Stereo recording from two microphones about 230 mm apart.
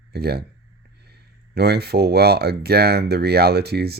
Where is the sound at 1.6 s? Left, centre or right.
Right.